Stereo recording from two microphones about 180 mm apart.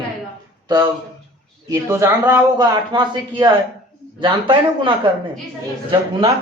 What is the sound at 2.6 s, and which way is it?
Speech, 25° right (ahead or behind).